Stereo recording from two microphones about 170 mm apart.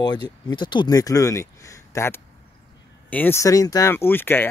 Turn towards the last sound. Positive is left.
turn(degrees=10)  # may be behind; listen again after turning